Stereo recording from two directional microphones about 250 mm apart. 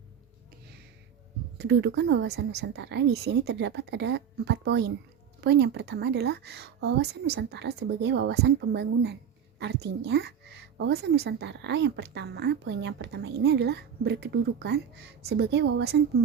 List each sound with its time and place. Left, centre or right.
1.5 s a woman's voice: right